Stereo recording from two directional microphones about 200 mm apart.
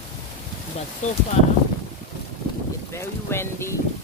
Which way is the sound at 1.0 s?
35° left (ahead or behind).